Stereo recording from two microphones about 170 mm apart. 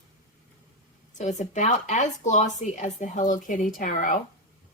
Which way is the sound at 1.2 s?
45° left (ahead or behind).